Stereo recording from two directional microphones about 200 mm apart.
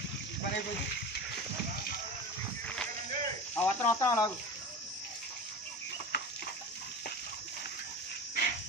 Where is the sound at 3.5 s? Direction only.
10° left (ahead or behind).